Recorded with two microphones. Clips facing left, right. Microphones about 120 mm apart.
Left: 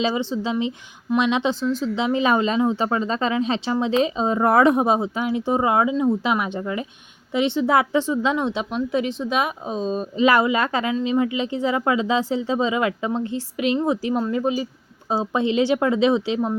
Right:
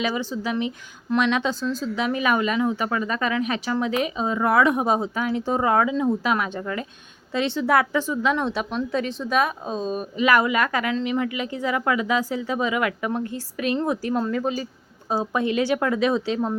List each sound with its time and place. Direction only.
0.0 s speech: 25° left (ahead or behind)
4.9 s speech: 20° left (ahead or behind)
5.9 s speech: 5° left (ahead or behind)
6.2 s speech: 20° left (ahead or behind)
15.1 s speech: 20° left (ahead or behind)